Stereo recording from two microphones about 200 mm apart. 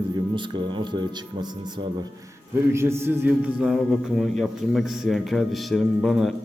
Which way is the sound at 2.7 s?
15° right (ahead or behind).